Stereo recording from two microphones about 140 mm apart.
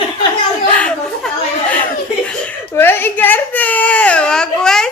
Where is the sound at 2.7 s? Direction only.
15° left (ahead or behind).